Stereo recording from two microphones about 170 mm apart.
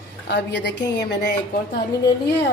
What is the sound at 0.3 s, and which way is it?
Speech, 90° left.